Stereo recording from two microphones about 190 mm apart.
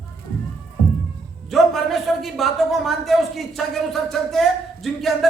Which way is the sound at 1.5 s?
Centre (ahead or behind).